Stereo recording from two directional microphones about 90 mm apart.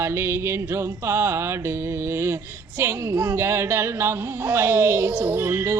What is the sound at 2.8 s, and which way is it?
Speech, 30° right (ahead or behind).